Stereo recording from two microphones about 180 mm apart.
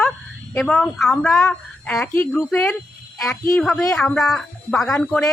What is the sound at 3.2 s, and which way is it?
Speech, 15° left (ahead or behind).